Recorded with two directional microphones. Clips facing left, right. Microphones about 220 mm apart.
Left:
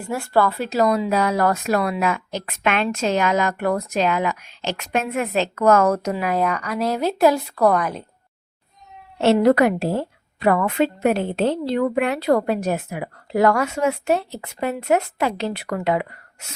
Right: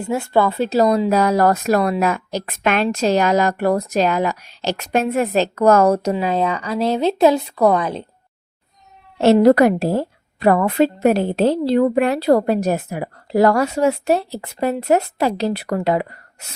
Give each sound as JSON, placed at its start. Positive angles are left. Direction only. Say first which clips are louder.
{"t": 0.1, "sound": "speech", "louder": "right 2 dB", "side_deg": -20}
{"t": 9.2, "sound": "speech", "louder": "right 4 dB", "side_deg": -40}